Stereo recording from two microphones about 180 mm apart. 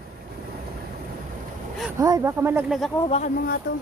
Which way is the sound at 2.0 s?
20° right (ahead or behind).